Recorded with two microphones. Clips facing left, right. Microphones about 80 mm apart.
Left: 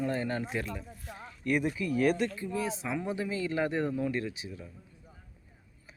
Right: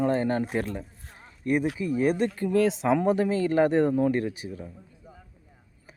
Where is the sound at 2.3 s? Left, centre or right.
Right.